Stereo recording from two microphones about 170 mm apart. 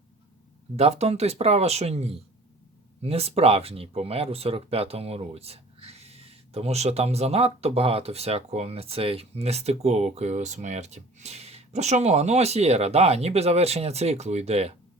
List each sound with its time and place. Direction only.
0.8 s speech: 40° right (ahead or behind)